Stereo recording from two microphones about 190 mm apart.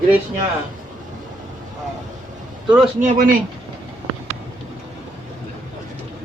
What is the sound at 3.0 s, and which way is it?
Speech, 40° right (ahead or behind).